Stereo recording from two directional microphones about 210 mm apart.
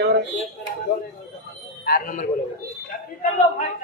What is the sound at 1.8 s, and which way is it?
Speech, 45° left (ahead or behind).